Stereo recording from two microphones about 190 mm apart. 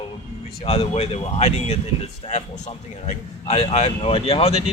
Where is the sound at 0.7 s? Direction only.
30° left (ahead or behind).